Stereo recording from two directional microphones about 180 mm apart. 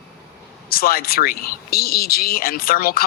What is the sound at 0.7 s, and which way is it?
Speech, 55° left (ahead or behind).